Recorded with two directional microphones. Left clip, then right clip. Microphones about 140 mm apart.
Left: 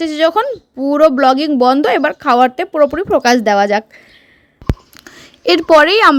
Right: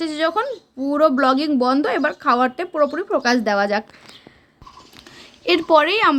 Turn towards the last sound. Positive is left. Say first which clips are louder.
# left 7 dB
turn(degrees=50)  # may be behind; listen again after turning